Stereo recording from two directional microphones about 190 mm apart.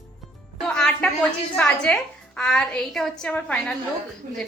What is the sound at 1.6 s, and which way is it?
A woman's voice, 5° left (ahead or behind).